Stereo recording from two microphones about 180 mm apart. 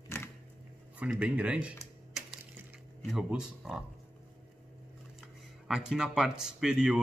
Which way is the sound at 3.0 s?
5° right (ahead or behind).